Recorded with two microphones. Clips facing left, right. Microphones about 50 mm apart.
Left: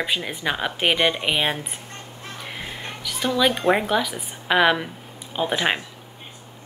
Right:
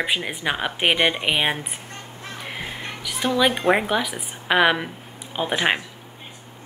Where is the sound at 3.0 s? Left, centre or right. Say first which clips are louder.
Right 1 dB; centre.